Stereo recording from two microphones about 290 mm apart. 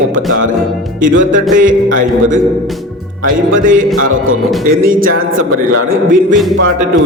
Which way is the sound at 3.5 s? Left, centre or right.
Right.